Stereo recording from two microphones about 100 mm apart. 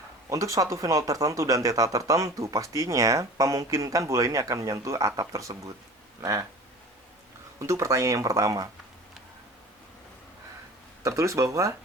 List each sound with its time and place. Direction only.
0.3 s speech: 30° right (ahead or behind)
7.6 s speech: 30° right (ahead or behind)
11.0 s speech: 30° right (ahead or behind)